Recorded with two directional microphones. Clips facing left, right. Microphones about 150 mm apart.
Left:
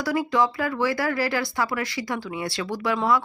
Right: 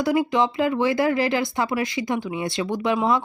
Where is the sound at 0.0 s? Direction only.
20° right (ahead or behind).